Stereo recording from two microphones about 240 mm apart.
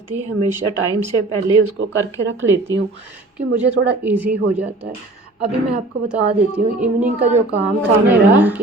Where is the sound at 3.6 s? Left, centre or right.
Right.